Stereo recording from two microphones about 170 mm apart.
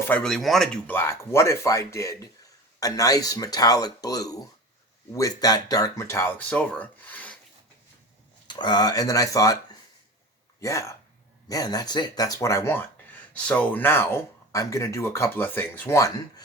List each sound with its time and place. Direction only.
0.0 s speech: 5° left (ahead or behind)
8.4 s speech: 25° left (ahead or behind)
10.6 s speech: 20° left (ahead or behind)